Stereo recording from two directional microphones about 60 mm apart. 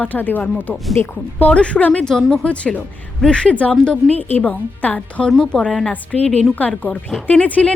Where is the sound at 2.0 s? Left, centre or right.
Centre.